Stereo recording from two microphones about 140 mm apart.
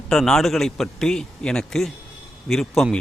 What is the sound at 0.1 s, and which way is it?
Speech, 5° left (ahead or behind).